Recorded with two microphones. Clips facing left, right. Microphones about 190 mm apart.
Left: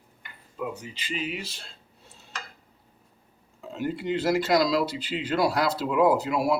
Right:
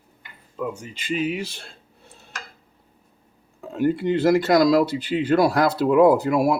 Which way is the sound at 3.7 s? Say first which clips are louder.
Right 7 dB; 55° right (ahead or behind).